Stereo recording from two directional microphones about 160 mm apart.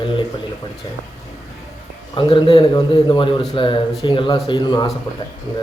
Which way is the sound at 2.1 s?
30° left (ahead or behind).